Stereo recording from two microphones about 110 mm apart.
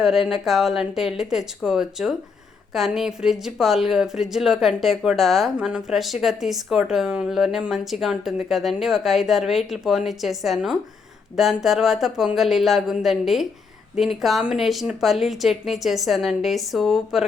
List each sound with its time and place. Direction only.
0.0 s speech: 5° right (ahead or behind)